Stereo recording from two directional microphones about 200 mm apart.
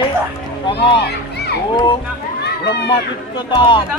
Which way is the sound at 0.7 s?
25° left (ahead or behind).